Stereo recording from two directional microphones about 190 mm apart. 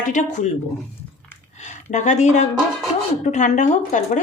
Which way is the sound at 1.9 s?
40° left (ahead or behind).